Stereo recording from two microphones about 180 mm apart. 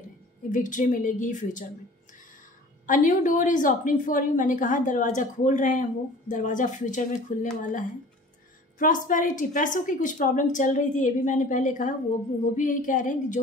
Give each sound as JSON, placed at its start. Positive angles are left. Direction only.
{"t": 0.5, "sound": "a woman's voice", "side_deg": 45}
{"t": 2.9, "sound": "a woman's voice", "side_deg": 45}